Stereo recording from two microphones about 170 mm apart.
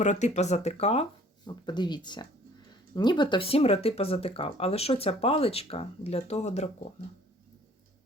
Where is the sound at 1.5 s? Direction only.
25° left (ahead or behind).